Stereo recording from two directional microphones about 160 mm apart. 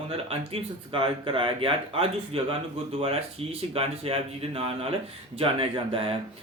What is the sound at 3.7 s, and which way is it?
Speech, 35° right (ahead or behind).